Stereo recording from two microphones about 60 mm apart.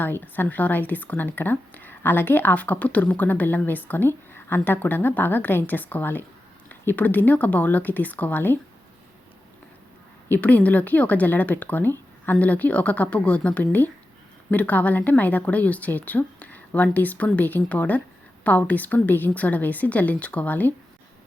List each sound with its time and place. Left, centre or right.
0.0 s a woman's voice: left
10.2 s speech: left